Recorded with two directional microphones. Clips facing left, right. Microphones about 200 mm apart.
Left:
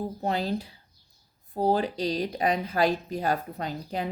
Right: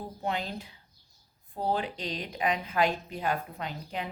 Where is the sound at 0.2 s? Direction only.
35° left (ahead or behind).